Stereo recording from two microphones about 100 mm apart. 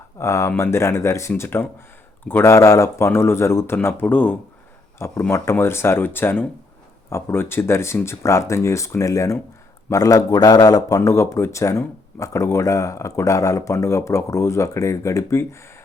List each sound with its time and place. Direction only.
0.2 s speech: 30° left (ahead or behind)